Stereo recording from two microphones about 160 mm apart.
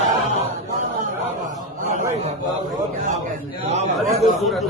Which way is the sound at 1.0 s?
55° right (ahead or behind).